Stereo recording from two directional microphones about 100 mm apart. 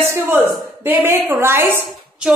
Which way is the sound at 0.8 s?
20° right (ahead or behind).